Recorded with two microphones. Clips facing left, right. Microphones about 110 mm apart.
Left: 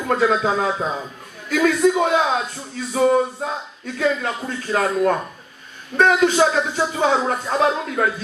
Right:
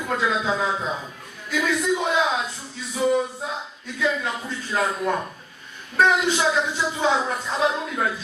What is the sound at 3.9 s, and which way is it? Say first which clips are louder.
Speech: left 4 dB; 50° left (ahead or behind).